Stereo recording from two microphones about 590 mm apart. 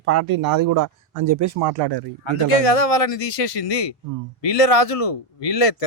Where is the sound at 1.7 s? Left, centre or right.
Right.